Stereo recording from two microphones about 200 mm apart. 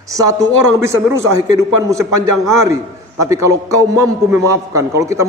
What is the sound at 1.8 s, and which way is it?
A man's voice, 15° right (ahead or behind).